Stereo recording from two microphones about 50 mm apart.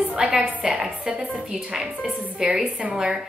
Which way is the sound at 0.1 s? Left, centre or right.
Centre.